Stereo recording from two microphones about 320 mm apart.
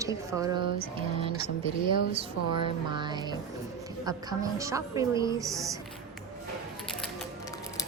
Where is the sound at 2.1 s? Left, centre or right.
Centre.